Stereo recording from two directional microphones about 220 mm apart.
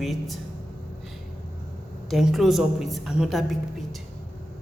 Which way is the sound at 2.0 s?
Centre (ahead or behind).